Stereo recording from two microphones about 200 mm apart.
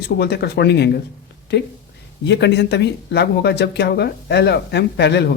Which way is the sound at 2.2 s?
60° left (ahead or behind).